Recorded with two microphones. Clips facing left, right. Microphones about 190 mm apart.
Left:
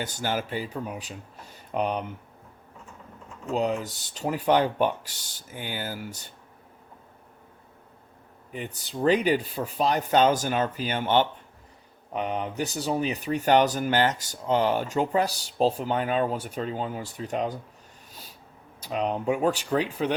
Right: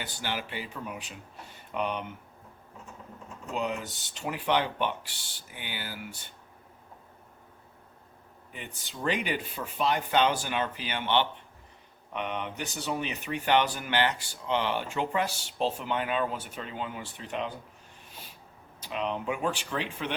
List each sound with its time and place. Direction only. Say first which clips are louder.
0.0 s speech: left 6 dB; 45° left (ahead or behind)
3.5 s speech: left 6 dB; 40° left (ahead or behind)
8.5 s speech: left 9 dB; 40° left (ahead or behind)
18.8 s speech: left 4 dB; 40° left (ahead or behind)